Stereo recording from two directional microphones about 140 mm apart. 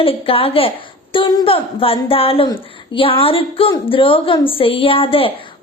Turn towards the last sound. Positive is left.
turn(degrees=40)  # may be behind; listen again after turning